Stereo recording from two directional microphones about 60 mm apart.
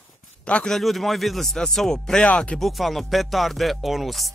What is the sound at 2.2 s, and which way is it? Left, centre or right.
Speech, centre.